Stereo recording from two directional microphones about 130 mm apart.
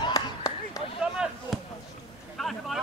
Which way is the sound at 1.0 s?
5° right (ahead or behind).